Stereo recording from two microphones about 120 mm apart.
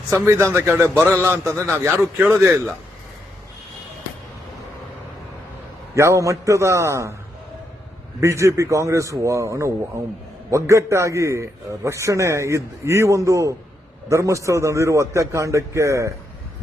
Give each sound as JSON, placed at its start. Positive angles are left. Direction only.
{"t": 0.1, "sound": "a man's voice", "side_deg": -25}
{"t": 5.9, "sound": "a man's voice", "side_deg": -25}
{"t": 8.2, "sound": "a man's voice", "side_deg": -25}